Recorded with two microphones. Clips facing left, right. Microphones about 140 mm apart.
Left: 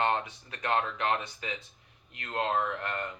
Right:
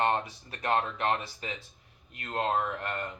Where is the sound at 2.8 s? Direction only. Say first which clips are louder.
Even; 35° right (ahead or behind).